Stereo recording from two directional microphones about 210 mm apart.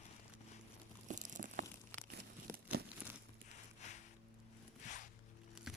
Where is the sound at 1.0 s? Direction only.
35° right (ahead or behind).